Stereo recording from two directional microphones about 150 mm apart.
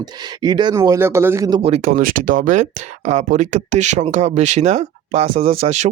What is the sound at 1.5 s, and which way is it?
Speech, 40° right (ahead or behind).